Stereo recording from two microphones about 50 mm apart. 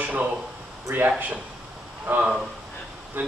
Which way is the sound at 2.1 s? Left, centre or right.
Right.